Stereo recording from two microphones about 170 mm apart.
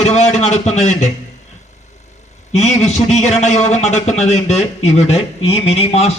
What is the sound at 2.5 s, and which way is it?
A man's voice, 40° left (ahead or behind).